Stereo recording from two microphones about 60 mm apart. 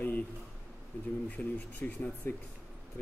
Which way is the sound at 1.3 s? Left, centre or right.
Left.